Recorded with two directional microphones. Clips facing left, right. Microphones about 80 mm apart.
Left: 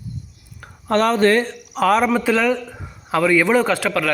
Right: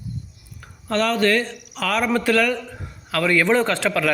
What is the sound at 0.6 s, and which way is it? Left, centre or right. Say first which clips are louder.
Speech: left 4 dB; left.